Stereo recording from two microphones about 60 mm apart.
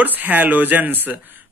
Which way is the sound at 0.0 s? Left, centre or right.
Right.